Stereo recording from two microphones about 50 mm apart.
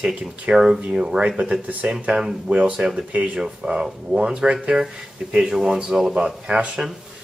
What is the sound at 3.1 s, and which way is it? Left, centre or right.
Speech, right.